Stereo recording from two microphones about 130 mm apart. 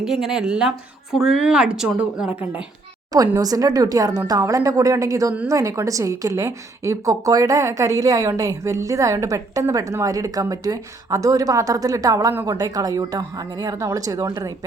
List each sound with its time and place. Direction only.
0.0 s a woman's voice: 5° right (ahead or behind)
3.3 s a woman's voice: 30° right (ahead or behind)